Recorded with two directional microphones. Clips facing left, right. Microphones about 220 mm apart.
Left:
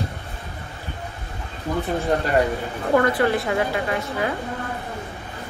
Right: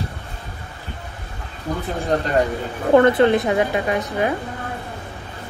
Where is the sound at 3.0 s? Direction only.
25° right (ahead or behind).